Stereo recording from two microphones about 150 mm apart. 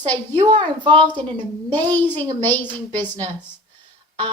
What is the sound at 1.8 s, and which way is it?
A woman's voice, 10° left (ahead or behind).